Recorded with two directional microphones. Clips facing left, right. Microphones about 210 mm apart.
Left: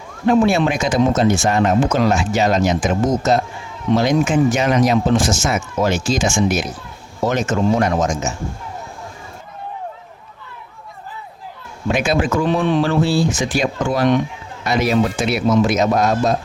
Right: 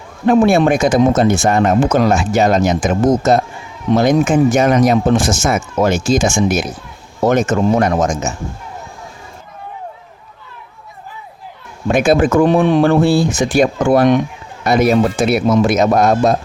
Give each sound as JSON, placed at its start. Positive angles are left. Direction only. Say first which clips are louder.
{"t": 0.3, "sound": "speech", "louder": "right 4 dB", "side_deg": -50}
{"t": 11.9, "sound": "speech", "louder": "right 6 dB", "side_deg": -50}